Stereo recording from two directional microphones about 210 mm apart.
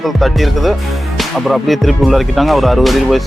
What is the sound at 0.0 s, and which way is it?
Music, centre (ahead or behind).